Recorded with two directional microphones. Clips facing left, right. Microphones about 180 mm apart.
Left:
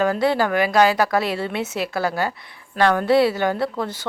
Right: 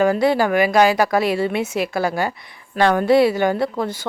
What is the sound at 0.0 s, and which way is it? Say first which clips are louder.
A woman's voice: right 3 dB; 10° right (ahead or behind).